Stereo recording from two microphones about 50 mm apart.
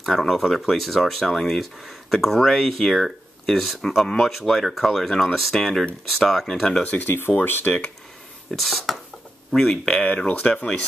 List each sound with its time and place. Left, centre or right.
0.0 s speech: centre
6.8 s speech: left
8.5 s speech: centre
9.6 s speech: centre
10.1 s speech: left